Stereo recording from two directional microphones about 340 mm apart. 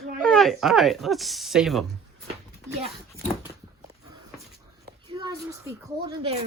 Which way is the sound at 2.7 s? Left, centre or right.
Centre.